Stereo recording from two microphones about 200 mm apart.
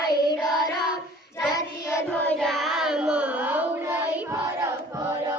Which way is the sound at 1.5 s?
15° left (ahead or behind).